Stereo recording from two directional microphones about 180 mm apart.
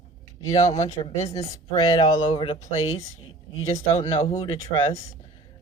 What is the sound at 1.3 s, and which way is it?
Speech, 25° left (ahead or behind).